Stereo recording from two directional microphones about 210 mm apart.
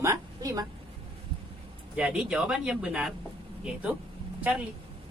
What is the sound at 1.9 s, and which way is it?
Speech, 5° right (ahead or behind).